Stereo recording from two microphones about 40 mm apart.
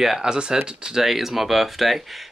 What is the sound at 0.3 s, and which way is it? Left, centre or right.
Speech, centre.